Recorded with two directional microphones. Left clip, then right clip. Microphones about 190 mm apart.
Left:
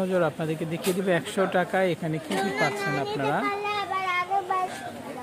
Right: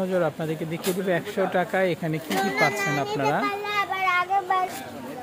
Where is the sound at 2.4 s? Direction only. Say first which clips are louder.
Right 4 dB; 25° right (ahead or behind).